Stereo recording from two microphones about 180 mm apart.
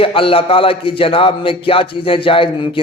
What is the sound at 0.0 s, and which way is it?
Speech, 30° left (ahead or behind).